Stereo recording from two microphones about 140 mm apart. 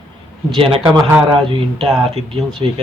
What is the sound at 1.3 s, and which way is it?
Speech, 40° right (ahead or behind).